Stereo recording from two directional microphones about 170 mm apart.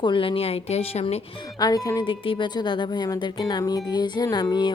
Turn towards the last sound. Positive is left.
turn(degrees=25)  # may be behind; listen again after turning